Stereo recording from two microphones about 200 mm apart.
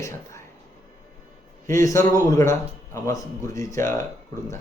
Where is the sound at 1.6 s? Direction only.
15° left (ahead or behind).